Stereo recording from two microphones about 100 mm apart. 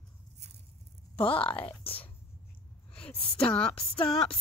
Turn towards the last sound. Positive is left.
turn(degrees=75)  # may be behind; listen again after turning